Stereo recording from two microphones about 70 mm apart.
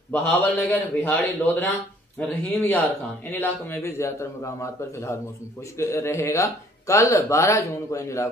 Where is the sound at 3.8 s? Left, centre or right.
Left.